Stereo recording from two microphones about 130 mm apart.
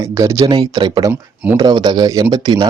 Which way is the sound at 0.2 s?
25° right (ahead or behind).